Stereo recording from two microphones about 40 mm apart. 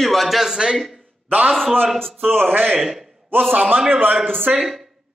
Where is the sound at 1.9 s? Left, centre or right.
Centre.